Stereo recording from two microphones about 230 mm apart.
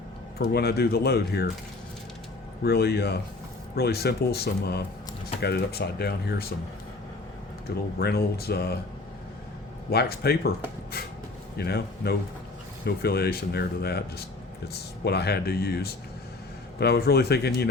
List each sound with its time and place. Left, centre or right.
0.3 s speech: left
2.6 s speech: left
7.9 s speech: left
9.9 s speech: left
11.5 s a man's voice: left